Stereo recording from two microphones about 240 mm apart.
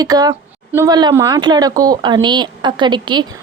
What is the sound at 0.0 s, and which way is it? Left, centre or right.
Speech, centre.